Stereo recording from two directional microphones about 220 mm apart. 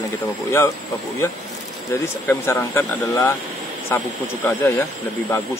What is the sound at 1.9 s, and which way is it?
Speech, 10° left (ahead or behind).